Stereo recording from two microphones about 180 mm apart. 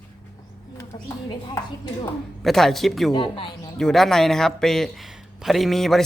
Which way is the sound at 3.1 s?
25° left (ahead or behind).